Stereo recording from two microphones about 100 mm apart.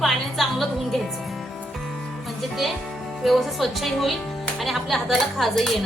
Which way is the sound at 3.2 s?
Centre (ahead or behind).